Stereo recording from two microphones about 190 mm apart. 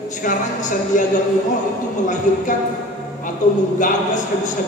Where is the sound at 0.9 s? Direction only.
45° left (ahead or behind).